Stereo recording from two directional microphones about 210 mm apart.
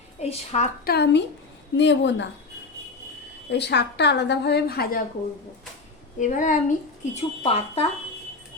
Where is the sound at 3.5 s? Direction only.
55° left (ahead or behind).